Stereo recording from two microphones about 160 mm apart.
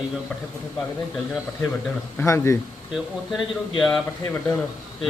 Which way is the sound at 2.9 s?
Centre (ahead or behind).